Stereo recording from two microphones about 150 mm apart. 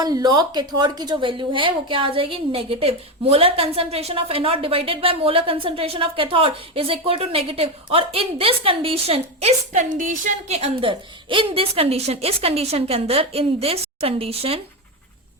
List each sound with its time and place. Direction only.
0.0 s a woman's voice: 25° right (ahead or behind)